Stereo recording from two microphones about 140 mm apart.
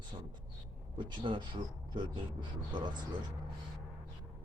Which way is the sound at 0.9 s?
35° right (ahead or behind).